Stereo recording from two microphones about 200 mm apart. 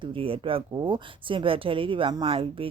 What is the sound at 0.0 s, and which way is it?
Speech, 25° right (ahead or behind).